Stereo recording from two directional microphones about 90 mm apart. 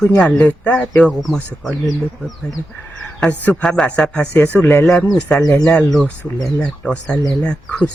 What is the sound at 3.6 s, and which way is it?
Speech, 5° left (ahead or behind).